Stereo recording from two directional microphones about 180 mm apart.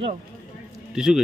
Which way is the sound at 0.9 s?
5° right (ahead or behind).